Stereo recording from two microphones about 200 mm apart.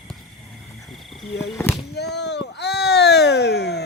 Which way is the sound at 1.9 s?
55° left (ahead or behind).